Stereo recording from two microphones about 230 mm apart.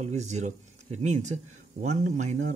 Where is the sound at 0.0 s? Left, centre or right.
Right.